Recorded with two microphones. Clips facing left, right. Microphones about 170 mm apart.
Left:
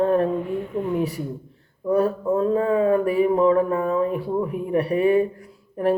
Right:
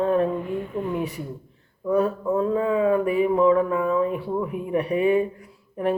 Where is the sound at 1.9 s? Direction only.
40° left (ahead or behind).